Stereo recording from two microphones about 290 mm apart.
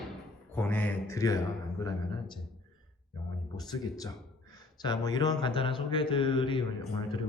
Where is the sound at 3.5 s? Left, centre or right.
Centre.